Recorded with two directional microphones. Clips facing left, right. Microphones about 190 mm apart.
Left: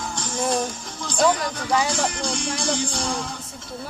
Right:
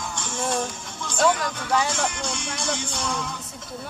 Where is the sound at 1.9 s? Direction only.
35° left (ahead or behind).